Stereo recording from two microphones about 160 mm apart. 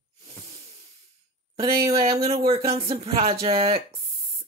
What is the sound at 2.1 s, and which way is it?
Speech, 40° right (ahead or behind).